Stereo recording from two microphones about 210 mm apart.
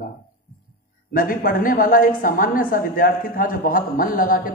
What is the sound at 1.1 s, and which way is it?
A man's voice, 40° left (ahead or behind).